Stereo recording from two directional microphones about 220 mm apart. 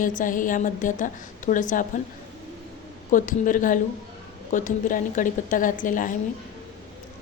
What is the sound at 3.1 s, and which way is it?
A woman's voice, 35° left (ahead or behind).